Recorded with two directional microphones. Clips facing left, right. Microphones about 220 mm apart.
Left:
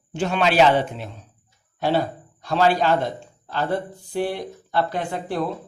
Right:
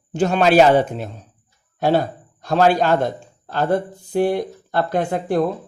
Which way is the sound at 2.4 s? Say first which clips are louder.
Right 3 dB; 45° right (ahead or behind).